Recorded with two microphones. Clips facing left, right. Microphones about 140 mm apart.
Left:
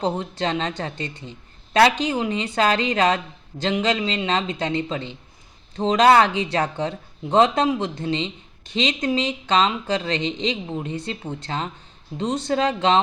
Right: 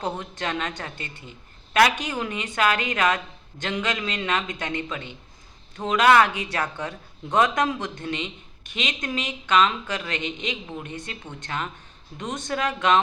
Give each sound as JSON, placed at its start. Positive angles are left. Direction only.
{"t": 0.0, "sound": "a woman's voice", "side_deg": 30}